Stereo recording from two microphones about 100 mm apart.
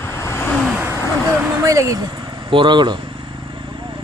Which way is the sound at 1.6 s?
30° right (ahead or behind).